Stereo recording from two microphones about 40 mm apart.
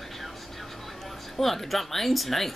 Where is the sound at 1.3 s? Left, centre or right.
Centre.